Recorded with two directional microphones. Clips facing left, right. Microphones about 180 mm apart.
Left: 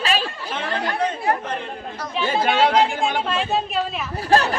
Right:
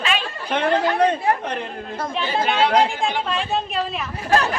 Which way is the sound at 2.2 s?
Centre (ahead or behind).